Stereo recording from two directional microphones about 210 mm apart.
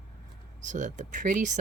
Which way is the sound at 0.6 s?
35° right (ahead or behind).